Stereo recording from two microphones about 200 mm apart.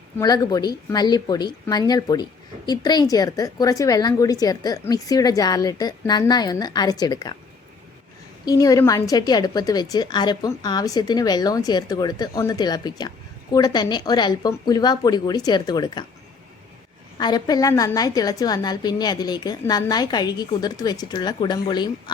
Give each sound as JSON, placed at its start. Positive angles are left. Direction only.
{"t": 0.2, "sound": "a woman's voice", "side_deg": 15}
{"t": 8.4, "sound": "a woman's voice", "side_deg": 20}
{"t": 17.2, "sound": "a woman's voice", "side_deg": 20}